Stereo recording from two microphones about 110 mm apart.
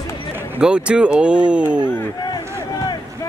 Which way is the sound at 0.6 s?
10° right (ahead or behind).